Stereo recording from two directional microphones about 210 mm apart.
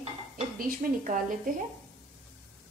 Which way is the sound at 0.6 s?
40° right (ahead or behind).